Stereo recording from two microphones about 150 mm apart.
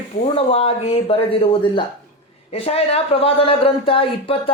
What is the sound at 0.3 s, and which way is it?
Speech, 40° left (ahead or behind).